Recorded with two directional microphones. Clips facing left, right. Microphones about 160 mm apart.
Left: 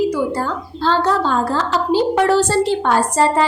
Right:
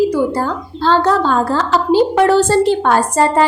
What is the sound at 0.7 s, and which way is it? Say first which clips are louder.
Speech: right 2 dB; 40° left (ahead or behind).